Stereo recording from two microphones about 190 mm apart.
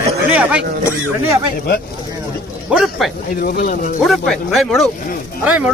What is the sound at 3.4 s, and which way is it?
Speech, 45° left (ahead or behind).